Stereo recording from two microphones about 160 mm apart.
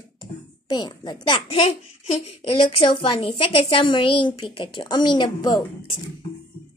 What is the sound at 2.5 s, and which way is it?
A woman's voice, 30° left (ahead or behind).